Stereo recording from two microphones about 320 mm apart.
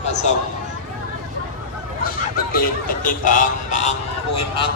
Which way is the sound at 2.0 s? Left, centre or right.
Left.